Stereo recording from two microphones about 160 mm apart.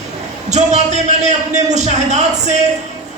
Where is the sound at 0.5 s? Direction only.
45° right (ahead or behind).